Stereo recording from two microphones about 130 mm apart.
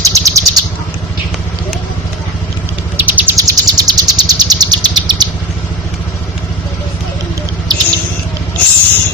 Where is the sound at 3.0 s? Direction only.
10° right (ahead or behind).